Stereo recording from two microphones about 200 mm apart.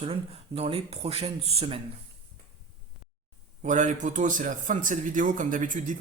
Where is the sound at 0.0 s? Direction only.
30° right (ahead or behind).